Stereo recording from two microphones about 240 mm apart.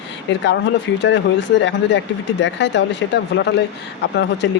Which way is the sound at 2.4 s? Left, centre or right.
Left.